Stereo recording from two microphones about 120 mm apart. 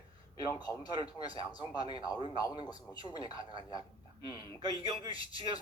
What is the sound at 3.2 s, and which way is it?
Speech, 45° right (ahead or behind).